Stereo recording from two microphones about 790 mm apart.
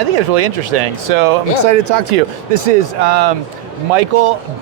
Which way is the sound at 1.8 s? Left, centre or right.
Right.